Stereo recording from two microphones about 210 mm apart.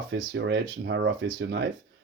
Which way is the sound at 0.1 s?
55° right (ahead or behind).